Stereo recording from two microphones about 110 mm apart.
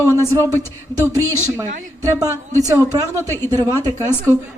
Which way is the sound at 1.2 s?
20° left (ahead or behind).